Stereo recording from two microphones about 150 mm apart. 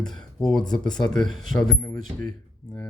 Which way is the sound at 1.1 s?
Centre (ahead or behind).